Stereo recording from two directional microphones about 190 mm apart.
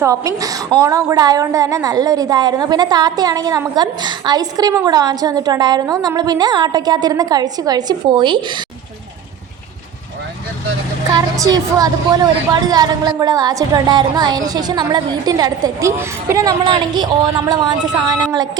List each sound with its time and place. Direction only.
0.0 s a woman's voice: 15° right (ahead or behind)
11.1 s a woman's voice: 20° right (ahead or behind)